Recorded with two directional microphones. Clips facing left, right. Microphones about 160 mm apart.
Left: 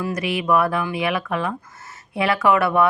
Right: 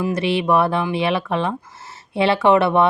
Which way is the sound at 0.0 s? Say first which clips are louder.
Right 4 dB; 30° right (ahead or behind).